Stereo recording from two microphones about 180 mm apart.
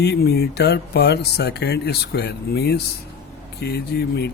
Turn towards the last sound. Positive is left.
turn(degrees=65)  # may be behind; listen again after turning